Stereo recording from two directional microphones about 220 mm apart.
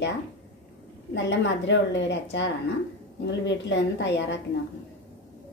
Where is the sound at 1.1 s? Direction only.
55° left (ahead or behind).